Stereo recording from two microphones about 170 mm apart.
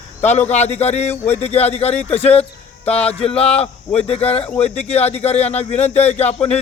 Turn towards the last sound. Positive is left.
turn(degrees=40)  # may be behind; listen again after turning